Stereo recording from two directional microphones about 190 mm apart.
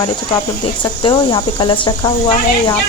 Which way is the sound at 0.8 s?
25° left (ahead or behind).